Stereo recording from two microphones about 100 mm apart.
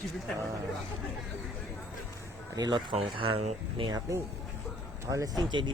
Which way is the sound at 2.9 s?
65° right (ahead or behind).